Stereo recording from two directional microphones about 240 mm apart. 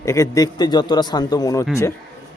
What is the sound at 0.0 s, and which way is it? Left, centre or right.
A man's voice, centre.